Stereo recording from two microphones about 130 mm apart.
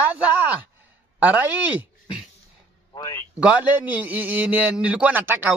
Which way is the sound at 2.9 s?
30° left (ahead or behind).